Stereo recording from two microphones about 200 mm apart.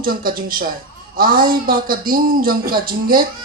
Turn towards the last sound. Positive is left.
turn(degrees=-45)  # may be behind; listen again after turning